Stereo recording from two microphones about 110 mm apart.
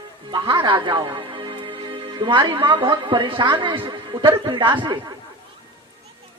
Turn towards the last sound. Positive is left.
turn(degrees=-45)  # may be behind; listen again after turning